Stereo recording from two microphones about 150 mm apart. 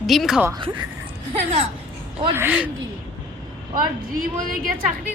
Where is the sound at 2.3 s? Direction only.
10° right (ahead or behind).